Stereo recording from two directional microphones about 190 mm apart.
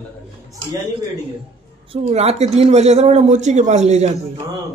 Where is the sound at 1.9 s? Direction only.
35° right (ahead or behind).